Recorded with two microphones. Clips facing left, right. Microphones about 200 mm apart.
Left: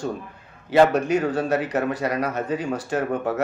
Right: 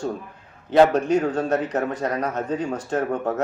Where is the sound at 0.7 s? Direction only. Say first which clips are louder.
Right 1 dB; 5° left (ahead or behind).